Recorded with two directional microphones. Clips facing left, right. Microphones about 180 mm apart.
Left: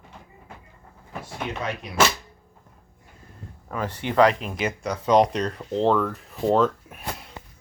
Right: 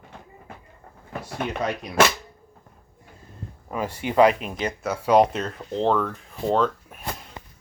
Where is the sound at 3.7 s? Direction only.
10° right (ahead or behind).